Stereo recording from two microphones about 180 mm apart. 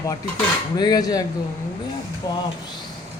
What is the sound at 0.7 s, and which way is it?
Cutlery, 20° left (ahead or behind).